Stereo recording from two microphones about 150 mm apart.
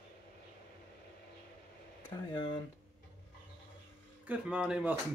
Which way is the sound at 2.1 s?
25° left (ahead or behind).